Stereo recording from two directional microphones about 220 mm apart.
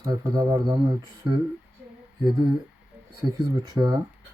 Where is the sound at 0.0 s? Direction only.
20° right (ahead or behind).